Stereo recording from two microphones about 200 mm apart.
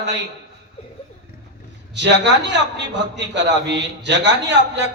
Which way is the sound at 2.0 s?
60° right (ahead or behind).